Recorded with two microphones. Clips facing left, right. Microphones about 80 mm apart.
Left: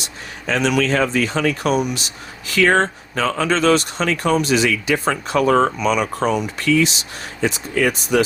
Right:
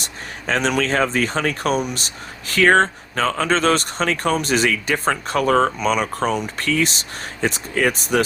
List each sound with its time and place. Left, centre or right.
0.0 s speech: right
5.4 s speech: left
6.6 s speech: right